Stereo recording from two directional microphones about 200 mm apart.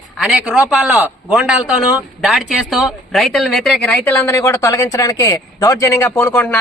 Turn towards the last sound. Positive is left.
turn(degrees=10)  # may be behind; listen again after turning